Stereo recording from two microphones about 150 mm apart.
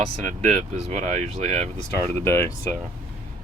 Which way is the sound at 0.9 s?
50° right (ahead or behind).